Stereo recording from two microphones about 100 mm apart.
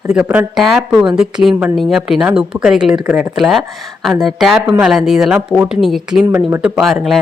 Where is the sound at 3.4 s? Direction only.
Centre (ahead or behind).